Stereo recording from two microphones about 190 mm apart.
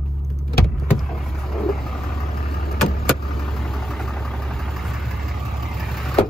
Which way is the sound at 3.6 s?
Centre (ahead or behind).